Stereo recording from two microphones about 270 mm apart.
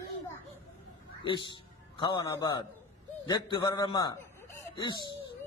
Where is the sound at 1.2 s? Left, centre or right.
Centre.